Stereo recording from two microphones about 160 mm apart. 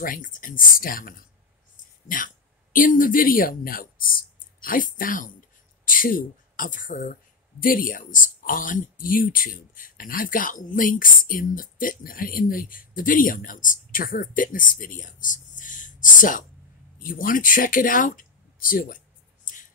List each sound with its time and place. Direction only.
0.0 s speech: 55° left (ahead or behind)
19.4 s music: 55° left (ahead or behind)